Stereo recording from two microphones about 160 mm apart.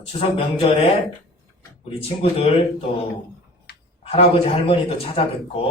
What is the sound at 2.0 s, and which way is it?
Speech, 40° left (ahead or behind).